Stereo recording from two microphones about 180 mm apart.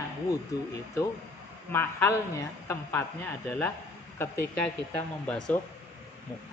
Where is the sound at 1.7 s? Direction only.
15° left (ahead or behind).